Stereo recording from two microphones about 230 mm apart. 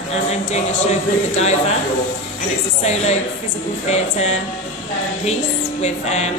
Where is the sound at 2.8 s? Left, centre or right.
Left.